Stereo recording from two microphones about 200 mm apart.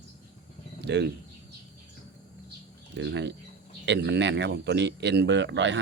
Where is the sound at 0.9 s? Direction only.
55° right (ahead or behind).